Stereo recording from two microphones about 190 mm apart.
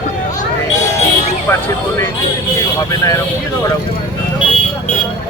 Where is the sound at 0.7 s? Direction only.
40° left (ahead or behind).